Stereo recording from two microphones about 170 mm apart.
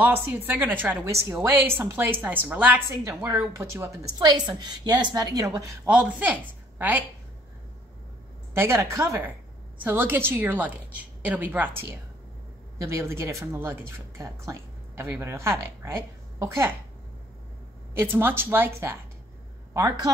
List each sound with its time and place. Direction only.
0.0 s a woman's voice: 10° right (ahead or behind)
5.9 s a woman's voice: 10° right (ahead or behind)
8.5 s a child's voice: 15° right (ahead or behind)
17.9 s speech: 10° right (ahead or behind)